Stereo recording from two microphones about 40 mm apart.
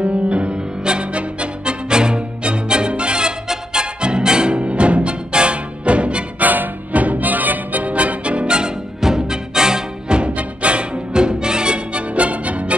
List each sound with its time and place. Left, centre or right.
0.0 s music: right
6.4 s music: right